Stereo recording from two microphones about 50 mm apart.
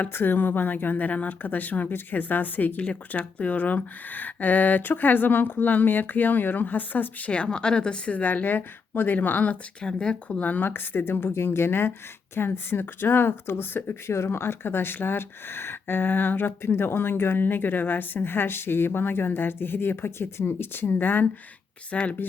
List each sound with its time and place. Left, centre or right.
0.1 s speech: left
7.3 s a woman's voice: centre
8.1 s speech: left
9.8 s speech: centre; by 13.9 s left
14.1 s speech: left
21.9 s speech: left